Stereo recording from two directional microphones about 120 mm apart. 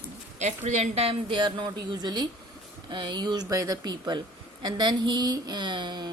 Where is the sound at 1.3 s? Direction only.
40° right (ahead or behind).